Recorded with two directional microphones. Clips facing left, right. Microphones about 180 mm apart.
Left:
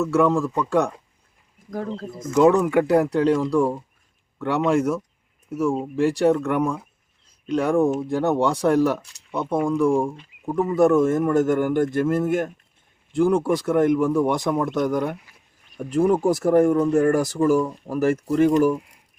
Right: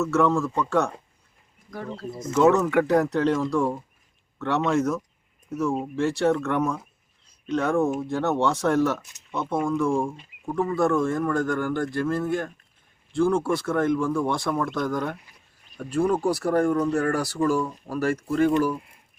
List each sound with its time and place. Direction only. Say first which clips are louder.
0.0 s speech: left 2 dB; 15° left (ahead or behind)
2.3 s speech: left 3 dB; 10° left (ahead or behind)